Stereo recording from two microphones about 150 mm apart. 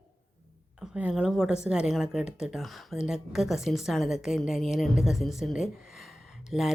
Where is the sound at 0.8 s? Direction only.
5° right (ahead or behind).